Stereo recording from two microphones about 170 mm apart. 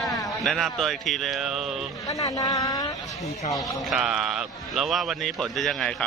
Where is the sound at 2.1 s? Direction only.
20° left (ahead or behind).